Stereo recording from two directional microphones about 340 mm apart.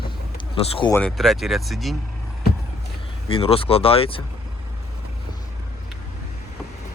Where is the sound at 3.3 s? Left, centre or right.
Centre.